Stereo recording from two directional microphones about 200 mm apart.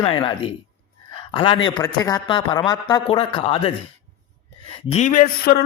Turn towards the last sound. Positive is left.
turn(degrees=50)  # may be behind; listen again after turning